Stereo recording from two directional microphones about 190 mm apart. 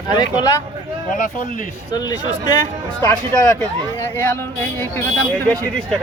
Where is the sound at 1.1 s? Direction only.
45° left (ahead or behind).